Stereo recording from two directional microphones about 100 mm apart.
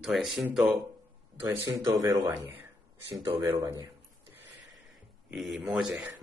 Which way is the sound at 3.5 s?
40° right (ahead or behind).